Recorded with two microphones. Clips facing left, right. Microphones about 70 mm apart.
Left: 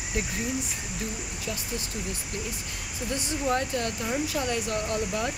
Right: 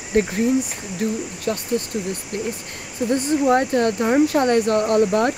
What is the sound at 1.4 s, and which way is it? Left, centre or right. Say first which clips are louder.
Speech: right 12 dB; right.